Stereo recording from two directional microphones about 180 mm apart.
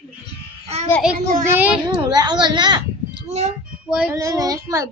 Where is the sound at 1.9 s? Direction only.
25° right (ahead or behind).